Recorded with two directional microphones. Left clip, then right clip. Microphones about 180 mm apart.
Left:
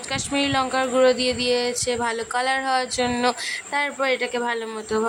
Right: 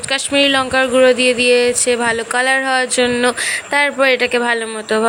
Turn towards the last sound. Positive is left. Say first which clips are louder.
# right 8 dB
turn(degrees=-15)  # may be behind; listen again after turning